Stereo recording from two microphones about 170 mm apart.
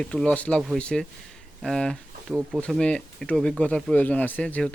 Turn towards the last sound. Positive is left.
turn(degrees=10)  # may be behind; listen again after turning